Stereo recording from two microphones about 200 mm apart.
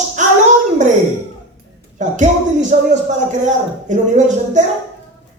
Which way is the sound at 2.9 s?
35° right (ahead or behind).